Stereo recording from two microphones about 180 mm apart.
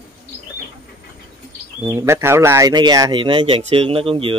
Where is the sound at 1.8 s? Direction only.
15° right (ahead or behind).